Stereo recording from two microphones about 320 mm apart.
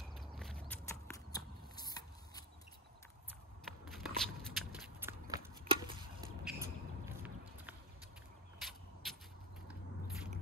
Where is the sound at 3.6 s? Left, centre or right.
Centre.